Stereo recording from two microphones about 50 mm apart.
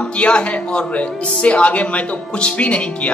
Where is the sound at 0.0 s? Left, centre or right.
Left.